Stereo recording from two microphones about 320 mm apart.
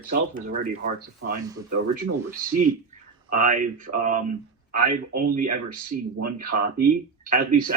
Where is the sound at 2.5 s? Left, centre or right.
Right.